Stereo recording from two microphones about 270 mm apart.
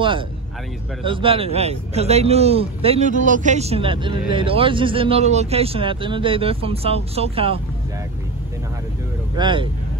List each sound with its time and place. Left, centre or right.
1.0 s a man's voice: centre
9.4 s speech: centre